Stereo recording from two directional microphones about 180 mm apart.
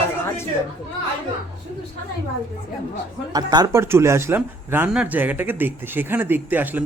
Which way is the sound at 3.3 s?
20° right (ahead or behind).